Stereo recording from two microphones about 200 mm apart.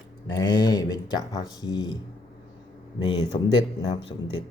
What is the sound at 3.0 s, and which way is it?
Speech, 20° left (ahead or behind).